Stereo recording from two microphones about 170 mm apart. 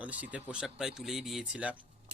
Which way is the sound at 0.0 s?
10° right (ahead or behind).